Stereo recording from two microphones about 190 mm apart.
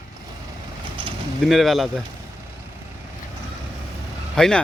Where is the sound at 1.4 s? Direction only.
Centre (ahead or behind).